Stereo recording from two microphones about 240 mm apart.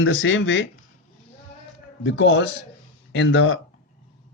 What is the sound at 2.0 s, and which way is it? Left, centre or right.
A man's voice, left.